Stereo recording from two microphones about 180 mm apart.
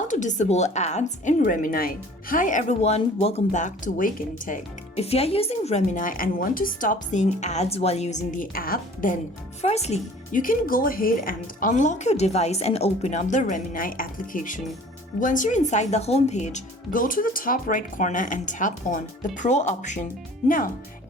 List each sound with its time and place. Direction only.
0.1 s a woman's voice: 45° left (ahead or behind)
9.6 s a woman's voice: 35° left (ahead or behind)